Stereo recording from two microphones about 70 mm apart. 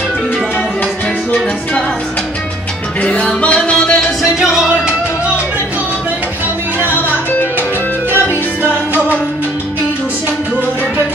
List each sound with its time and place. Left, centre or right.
3.0 s music: centre
4.2 s music: centre